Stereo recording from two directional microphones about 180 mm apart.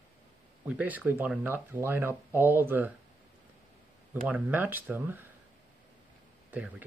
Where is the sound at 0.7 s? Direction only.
10° right (ahead or behind).